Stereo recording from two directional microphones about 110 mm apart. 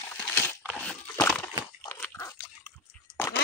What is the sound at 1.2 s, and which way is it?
Water, 15° left (ahead or behind).